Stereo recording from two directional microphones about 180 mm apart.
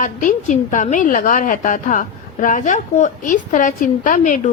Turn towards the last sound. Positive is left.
turn(degrees=45)  # may be behind; listen again after turning